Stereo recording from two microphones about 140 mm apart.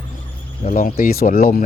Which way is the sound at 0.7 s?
75° left (ahead or behind).